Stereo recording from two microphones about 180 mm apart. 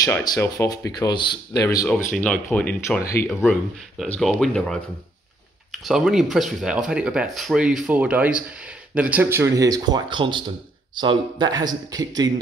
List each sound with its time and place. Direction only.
0.0 s speech: 20° left (ahead or behind)
2.0 s speech: 45° left (ahead or behind)
2.5 s speech: 10° left (ahead or behind)
4.0 s speech: centre (ahead or behind); by 12.3 s 20° right (ahead or behind)